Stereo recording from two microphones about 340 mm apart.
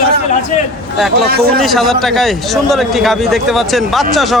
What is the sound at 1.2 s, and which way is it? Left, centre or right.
Speech, right.